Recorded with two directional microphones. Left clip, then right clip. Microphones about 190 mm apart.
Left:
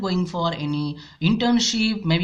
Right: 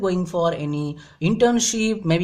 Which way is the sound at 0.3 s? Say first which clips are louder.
Right 4 dB; 30° right (ahead or behind).